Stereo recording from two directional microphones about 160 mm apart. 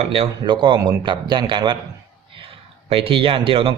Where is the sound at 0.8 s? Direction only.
20° right (ahead or behind).